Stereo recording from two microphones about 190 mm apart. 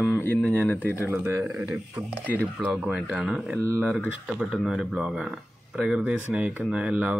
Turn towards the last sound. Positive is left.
turn(degrees=-5)  # may be behind; listen again after turning